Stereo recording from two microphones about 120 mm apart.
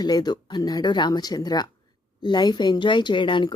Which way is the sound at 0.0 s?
35° left (ahead or behind).